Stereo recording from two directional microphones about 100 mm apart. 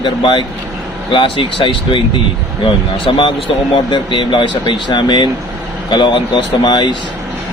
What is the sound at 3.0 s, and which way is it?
Speech, 60° left (ahead or behind).